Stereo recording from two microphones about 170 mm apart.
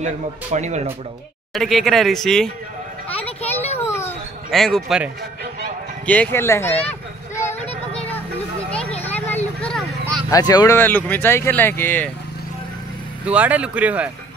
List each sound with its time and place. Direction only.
0.0 s speech: 45° right (ahead or behind)
1.5 s speech: centre (ahead or behind)
3.2 s children playing: 35° left (ahead or behind)
3.8 s a sound: 15° left (ahead or behind)
4.5 s speech: centre (ahead or behind)
6.0 s speech: 10° left (ahead or behind)
9.0 s vehicle: 10° left (ahead or behind)
10.3 s speech: 20° left (ahead or behind)
10.8 s speech: 10° left (ahead or behind)
13.2 s speech: 10° right (ahead or behind)